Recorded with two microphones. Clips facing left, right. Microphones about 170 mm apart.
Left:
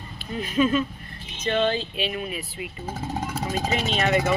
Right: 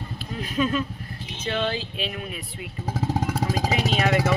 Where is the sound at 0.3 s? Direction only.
Centre (ahead or behind).